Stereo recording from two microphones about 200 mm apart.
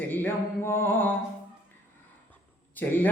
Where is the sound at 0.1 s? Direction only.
10° left (ahead or behind).